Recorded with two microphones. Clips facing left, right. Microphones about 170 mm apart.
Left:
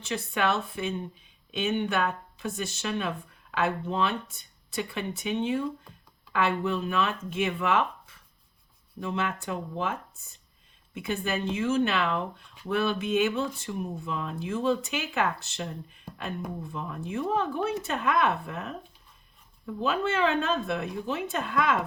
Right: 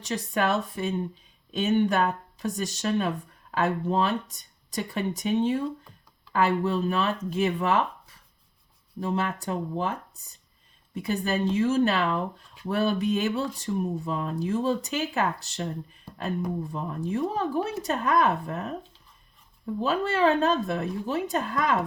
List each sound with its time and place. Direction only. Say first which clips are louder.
0.0 s speech: right 2 dB; 40° right (ahead or behind)
10.9 s speech: right 3 dB; 35° right (ahead or behind)
19.8 s speech: right 3 dB; 35° right (ahead or behind)